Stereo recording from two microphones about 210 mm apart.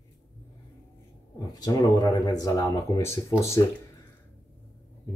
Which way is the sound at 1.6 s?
15° left (ahead or behind).